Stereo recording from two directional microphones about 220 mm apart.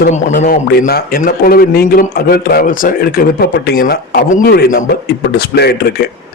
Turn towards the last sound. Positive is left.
turn(degrees=50)  # may be behind; listen again after turning